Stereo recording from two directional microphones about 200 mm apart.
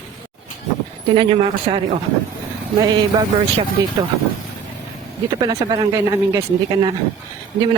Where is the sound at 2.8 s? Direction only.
20° right (ahead or behind).